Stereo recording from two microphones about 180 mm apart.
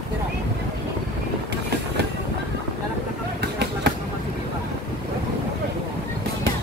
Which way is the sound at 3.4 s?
65° right (ahead or behind).